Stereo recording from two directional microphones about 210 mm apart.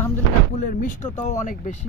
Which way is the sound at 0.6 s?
40° left (ahead or behind).